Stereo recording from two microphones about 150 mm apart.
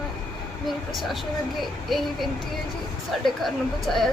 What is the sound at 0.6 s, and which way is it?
Speech, centre (ahead or behind).